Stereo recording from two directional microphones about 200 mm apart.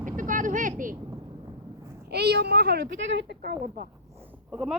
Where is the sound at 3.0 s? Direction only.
65° right (ahead or behind).